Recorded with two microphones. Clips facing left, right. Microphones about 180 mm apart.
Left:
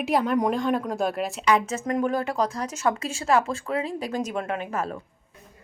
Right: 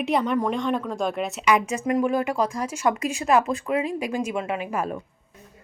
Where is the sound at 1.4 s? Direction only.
10° right (ahead or behind).